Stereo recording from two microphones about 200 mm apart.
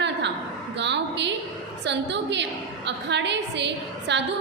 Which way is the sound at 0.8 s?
60° right (ahead or behind).